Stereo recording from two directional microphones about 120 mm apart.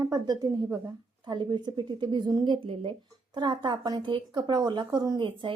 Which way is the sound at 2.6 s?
50° right (ahead or behind).